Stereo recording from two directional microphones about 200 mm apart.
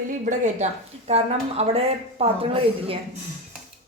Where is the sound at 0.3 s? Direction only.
35° right (ahead or behind).